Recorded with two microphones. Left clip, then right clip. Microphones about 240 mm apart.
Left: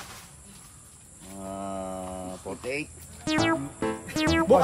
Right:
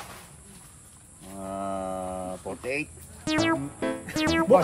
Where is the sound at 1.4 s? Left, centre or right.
Centre.